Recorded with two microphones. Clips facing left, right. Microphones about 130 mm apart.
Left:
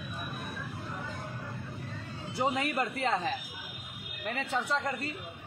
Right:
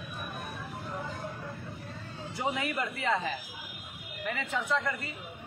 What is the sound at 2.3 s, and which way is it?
A man's voice, 35° left (ahead or behind).